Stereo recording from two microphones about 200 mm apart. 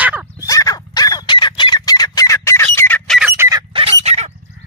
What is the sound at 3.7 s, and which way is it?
Goose, 30° right (ahead or behind).